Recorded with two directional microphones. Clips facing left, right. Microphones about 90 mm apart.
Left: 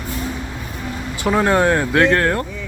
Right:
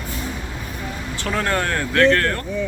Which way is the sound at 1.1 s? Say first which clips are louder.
Left 7 dB; 15° left (ahead or behind).